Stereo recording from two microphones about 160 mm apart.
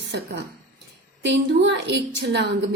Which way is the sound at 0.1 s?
90° right.